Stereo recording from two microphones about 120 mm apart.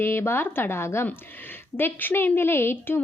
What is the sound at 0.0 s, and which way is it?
A woman's voice, 20° left (ahead or behind).